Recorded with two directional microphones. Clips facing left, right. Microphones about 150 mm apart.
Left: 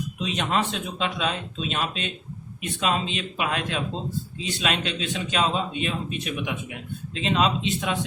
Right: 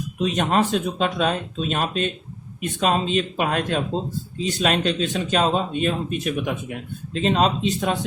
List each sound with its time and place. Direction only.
0.2 s a man's voice: 45° right (ahead or behind)